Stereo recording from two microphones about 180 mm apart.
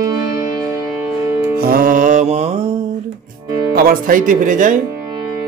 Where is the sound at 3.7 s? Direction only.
55° right (ahead or behind).